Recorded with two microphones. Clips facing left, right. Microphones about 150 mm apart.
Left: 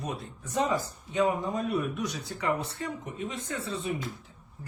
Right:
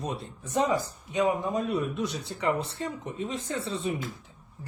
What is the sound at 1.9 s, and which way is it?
Speech, 25° right (ahead or behind).